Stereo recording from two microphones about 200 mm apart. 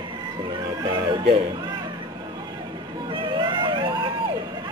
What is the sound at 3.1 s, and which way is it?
Vehicle, 25° right (ahead or behind).